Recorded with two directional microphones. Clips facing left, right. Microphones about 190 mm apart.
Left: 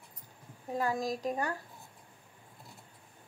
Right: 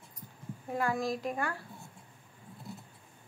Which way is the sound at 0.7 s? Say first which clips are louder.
Even; 20° left (ahead or behind).